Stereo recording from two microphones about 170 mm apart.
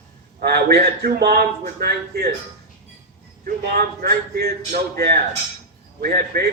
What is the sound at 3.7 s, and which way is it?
A man's voice, 65° right (ahead or behind).